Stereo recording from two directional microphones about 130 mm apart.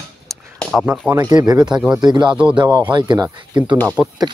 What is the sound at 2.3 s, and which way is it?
Speech, 10° right (ahead or behind).